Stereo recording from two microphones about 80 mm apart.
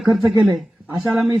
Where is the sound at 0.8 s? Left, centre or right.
Centre.